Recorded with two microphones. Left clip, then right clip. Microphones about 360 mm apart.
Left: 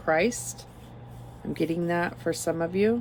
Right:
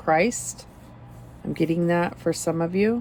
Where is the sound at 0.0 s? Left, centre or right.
Centre.